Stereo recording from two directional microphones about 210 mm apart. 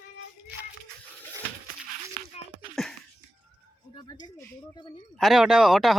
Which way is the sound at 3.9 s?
20° left (ahead or behind).